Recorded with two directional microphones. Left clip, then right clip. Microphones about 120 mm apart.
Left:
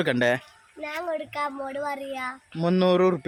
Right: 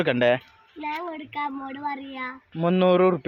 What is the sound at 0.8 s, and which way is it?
A child's voice, 40° left (ahead or behind).